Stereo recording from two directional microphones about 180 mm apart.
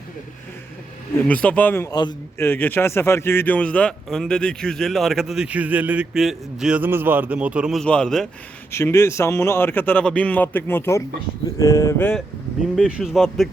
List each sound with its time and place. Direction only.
1.2 s speech: 10° left (ahead or behind)
2.0 s a man's voice: 25° left (ahead or behind)
2.5 s a man's voice: 10° left (ahead or behind)
8.7 s speech: 15° left (ahead or behind)
12.7 s a man's voice: 5° right (ahead or behind)